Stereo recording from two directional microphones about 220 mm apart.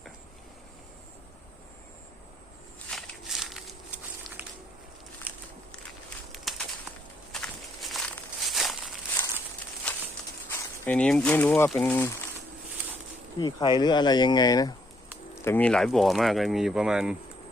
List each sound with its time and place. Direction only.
2.9 s walk: centre (ahead or behind)
6.5 s bird: centre (ahead or behind)
7.4 s walk: centre (ahead or behind)
8.4 s crumpling: centre (ahead or behind)
9.9 s a sound: 5° left (ahead or behind)
10.8 s speech: 5° left (ahead or behind)
13.4 s speech: 20° left (ahead or behind); by 17.2 s 5° right (ahead or behind)